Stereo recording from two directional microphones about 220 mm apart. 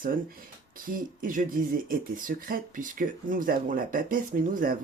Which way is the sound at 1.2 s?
40° right (ahead or behind).